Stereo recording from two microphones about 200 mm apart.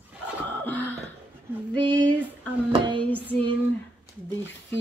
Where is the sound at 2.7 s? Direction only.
25° right (ahead or behind).